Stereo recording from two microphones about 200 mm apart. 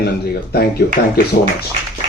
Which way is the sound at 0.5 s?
50° left (ahead or behind).